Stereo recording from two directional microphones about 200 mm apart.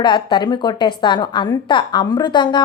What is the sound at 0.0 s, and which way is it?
A woman's voice, 20° left (ahead or behind).